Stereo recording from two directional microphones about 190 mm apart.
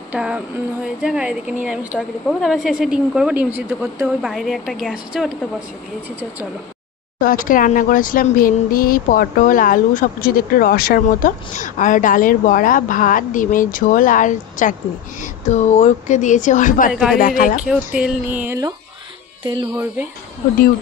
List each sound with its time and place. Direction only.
0.1 s a woman's voice: 5° right (ahead or behind)
7.2 s speech: 45° left (ahead or behind)
16.9 s a woman's voice: 5° right (ahead or behind)
17.2 s speech: 45° left (ahead or behind)
17.6 s speech: 5° right (ahead or behind)